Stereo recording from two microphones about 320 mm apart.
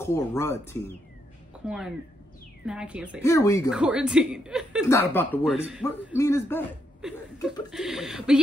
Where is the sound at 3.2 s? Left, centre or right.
Centre.